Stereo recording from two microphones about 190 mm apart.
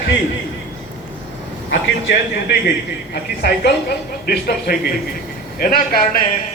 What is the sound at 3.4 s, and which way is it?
A man's voice, 60° left (ahead or behind).